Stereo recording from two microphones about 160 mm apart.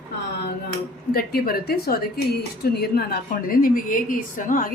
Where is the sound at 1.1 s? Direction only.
70° left (ahead or behind).